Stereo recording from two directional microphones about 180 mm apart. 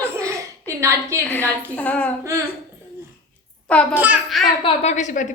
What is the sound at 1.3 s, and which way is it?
Speech, 10° left (ahead or behind).